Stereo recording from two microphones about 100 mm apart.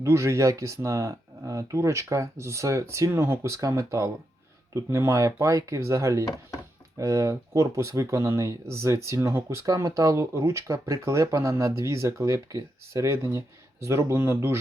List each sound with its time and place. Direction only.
0.0 s speech: 30° right (ahead or behind)